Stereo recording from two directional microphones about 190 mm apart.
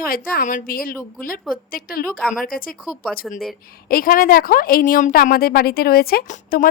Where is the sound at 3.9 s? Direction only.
50° left (ahead or behind).